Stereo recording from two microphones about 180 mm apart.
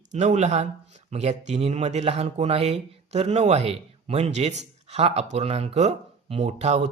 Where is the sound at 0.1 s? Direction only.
40° right (ahead or behind).